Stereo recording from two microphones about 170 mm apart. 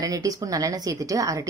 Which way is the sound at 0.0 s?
20° right (ahead or behind).